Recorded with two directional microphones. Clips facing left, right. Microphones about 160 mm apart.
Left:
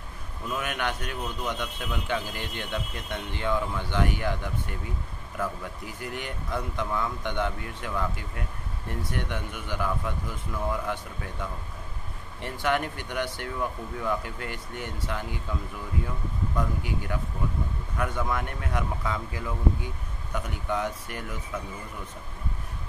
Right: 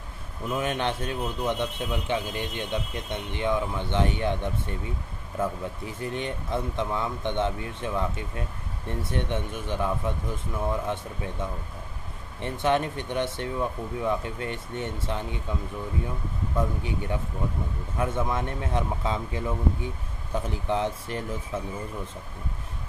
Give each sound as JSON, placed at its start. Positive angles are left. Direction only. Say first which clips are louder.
{"t": 0.5, "sound": "speech", "louder": "right 3 dB", "side_deg": -25}
{"t": 16.5, "sound": "speech", "louder": "right 3 dB", "side_deg": -25}